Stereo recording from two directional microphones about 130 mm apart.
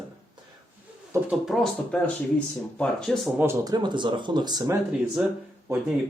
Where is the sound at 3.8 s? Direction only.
35° right (ahead or behind).